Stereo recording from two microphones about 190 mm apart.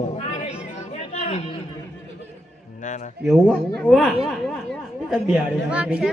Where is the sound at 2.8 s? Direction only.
40° left (ahead or behind).